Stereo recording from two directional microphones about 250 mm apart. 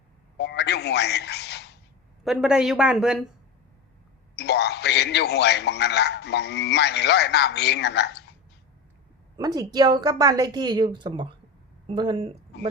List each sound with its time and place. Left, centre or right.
0.3 s a sound: left
2.2 s speech: centre
4.4 s a man's voice: left
9.4 s a woman's voice: centre